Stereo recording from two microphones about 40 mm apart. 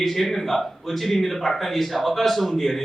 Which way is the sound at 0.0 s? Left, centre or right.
Centre.